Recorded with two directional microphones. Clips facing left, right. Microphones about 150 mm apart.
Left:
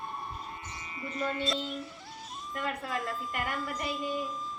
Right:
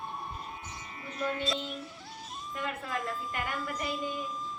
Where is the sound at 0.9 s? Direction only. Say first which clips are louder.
Left 1 dB; centre (ahead or behind).